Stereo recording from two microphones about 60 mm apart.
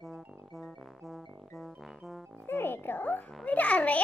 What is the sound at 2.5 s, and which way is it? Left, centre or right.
Music, left.